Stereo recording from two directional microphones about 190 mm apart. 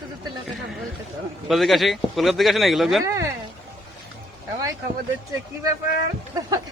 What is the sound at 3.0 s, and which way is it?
Speech, 15° right (ahead or behind).